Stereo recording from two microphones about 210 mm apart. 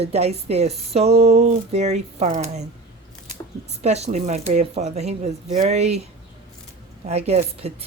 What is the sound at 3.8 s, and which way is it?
A woman's voice, 30° right (ahead or behind).